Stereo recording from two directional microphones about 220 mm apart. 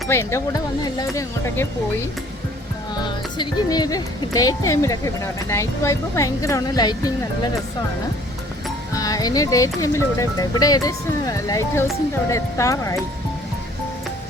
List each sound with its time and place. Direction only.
0.1 s speech: 10° left (ahead or behind)
3.0 s speech: 20° left (ahead or behind)
8.9 s speech: 15° left (ahead or behind)